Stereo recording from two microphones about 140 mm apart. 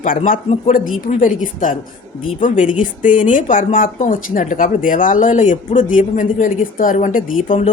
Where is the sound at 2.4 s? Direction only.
65° left (ahead or behind).